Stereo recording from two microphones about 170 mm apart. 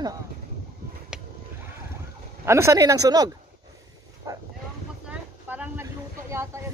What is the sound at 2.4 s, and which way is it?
Speech, 15° right (ahead or behind).